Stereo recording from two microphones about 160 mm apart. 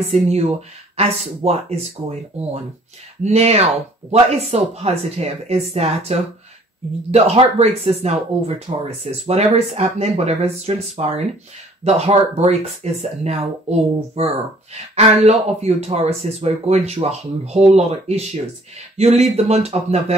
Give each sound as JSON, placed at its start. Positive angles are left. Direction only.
{"t": 0.1, "sound": "speech", "side_deg": -40}